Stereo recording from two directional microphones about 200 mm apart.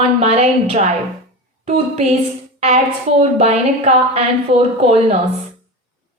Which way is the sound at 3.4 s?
30° right (ahead or behind).